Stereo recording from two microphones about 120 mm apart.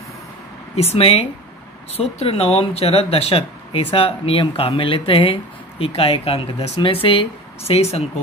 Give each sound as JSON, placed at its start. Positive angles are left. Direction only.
{"t": 0.7, "sound": "speech", "side_deg": 55}